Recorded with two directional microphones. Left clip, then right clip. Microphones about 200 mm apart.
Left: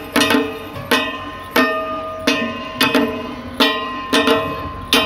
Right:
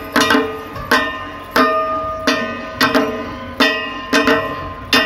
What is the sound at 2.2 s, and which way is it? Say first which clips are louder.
Music: left 3 dB; 20° left (ahead or behind).